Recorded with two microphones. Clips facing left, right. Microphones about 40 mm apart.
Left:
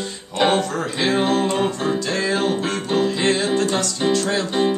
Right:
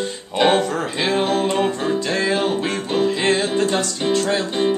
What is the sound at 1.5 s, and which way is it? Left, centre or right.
Music, centre.